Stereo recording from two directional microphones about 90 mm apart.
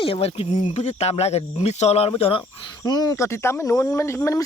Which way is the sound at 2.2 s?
75° left (ahead or behind).